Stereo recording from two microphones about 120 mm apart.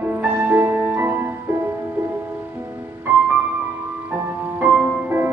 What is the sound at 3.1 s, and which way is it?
Music, 15° right (ahead or behind).